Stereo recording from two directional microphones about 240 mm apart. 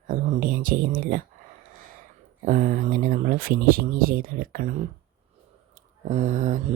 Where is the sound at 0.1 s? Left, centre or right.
Right.